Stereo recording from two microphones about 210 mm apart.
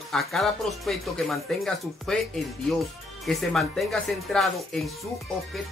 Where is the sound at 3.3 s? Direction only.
Centre (ahead or behind).